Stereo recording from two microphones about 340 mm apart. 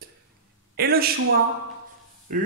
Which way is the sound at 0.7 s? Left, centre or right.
Right.